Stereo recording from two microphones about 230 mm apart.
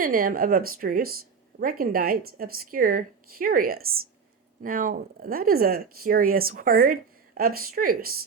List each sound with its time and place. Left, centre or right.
0.0 s speech: right